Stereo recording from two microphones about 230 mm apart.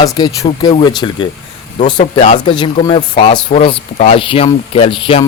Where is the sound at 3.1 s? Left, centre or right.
Left.